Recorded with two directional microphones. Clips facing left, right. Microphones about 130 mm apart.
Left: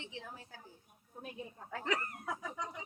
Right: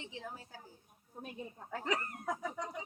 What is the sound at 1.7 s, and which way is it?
Speech, 35° right (ahead or behind).